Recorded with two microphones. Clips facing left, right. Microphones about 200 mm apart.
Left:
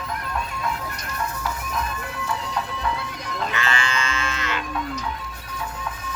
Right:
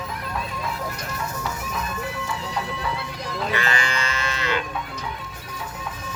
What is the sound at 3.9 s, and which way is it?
Music, 35° right (ahead or behind).